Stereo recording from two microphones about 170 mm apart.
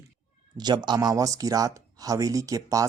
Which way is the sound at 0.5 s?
25° right (ahead or behind).